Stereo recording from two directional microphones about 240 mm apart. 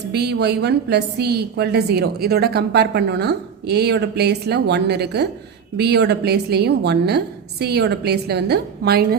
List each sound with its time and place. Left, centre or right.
0.1 s a woman's voice: right